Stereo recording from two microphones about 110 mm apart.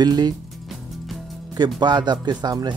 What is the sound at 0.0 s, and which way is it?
Speech, 40° right (ahead or behind).